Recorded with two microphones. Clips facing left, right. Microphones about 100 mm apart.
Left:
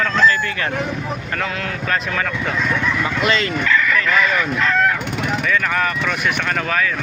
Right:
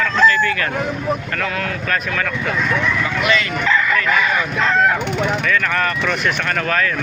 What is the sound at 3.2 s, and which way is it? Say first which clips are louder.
Speech: even; 35° left (ahead or behind).